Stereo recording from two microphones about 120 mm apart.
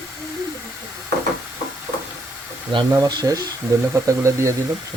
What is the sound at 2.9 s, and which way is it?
Speech, 35° right (ahead or behind).